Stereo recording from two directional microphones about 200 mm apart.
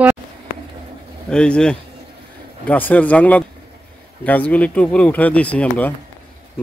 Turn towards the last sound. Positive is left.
turn(degrees=5)  # may be behind; listen again after turning